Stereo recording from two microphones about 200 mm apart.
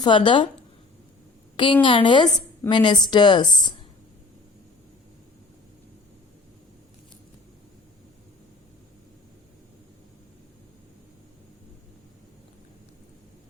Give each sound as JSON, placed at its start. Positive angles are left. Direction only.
{"t": 0.0, "sound": "a woman's voice", "side_deg": 25}
{"t": 1.5, "sound": "a woman's voice", "side_deg": 25}